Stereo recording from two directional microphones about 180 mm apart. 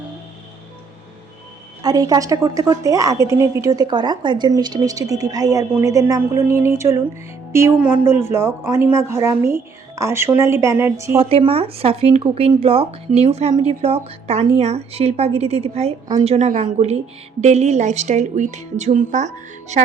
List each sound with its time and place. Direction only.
1.8 s a woman's voice: 20° right (ahead or behind)
11.3 s speech: 35° right (ahead or behind)